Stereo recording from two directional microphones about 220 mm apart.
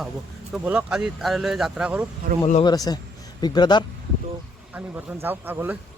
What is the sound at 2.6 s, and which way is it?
Speech, 20° left (ahead or behind).